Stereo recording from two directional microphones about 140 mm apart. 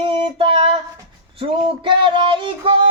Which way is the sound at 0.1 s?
40° right (ahead or behind).